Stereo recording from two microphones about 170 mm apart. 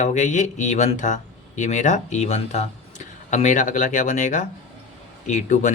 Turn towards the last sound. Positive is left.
turn(degrees=45)  # may be behind; listen again after turning